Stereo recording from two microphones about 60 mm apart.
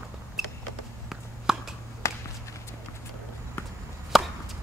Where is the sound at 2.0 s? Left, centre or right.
Left.